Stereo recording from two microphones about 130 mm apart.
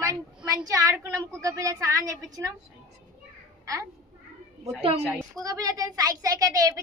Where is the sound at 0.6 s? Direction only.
25° right (ahead or behind).